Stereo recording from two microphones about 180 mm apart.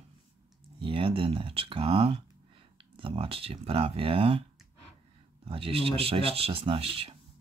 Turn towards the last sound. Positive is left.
turn(degrees=-30)  # may be behind; listen again after turning